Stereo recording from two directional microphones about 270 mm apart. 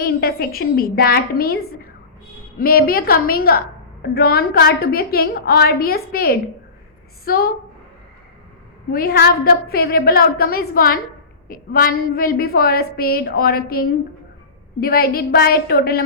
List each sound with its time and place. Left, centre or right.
0.0 s a woman's voice: left
8.9 s a woman's voice: left